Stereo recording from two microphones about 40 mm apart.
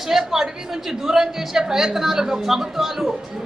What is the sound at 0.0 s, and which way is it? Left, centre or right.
A woman's voice, centre.